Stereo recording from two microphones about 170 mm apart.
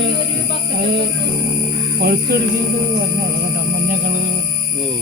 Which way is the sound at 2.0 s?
65° right (ahead or behind).